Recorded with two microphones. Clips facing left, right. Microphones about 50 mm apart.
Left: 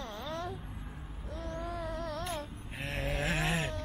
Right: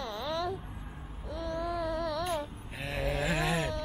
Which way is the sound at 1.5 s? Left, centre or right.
Right.